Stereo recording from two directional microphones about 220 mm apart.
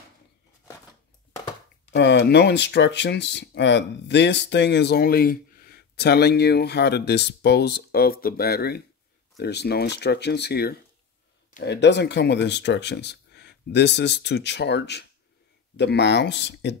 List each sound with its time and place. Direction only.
1.9 s speech: 50° left (ahead or behind)